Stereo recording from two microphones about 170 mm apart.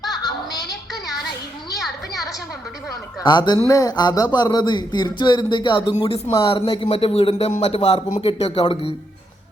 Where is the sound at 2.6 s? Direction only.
5° right (ahead or behind).